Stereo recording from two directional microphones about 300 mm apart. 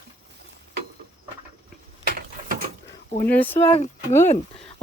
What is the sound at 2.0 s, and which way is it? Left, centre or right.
Mechanisms, right.